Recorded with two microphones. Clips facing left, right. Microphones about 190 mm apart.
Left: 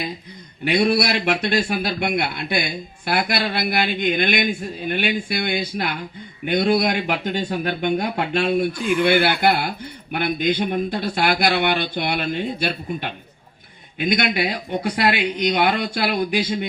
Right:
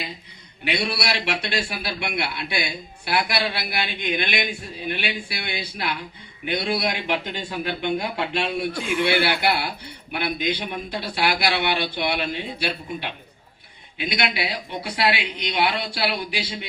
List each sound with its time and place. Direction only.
0.6 s speech: 45° left (ahead or behind)